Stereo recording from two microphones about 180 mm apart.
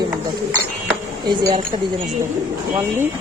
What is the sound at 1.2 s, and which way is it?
Speech, 25° right (ahead or behind).